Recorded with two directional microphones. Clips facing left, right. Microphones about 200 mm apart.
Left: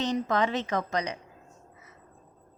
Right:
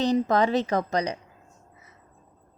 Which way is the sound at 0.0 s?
35° right (ahead or behind).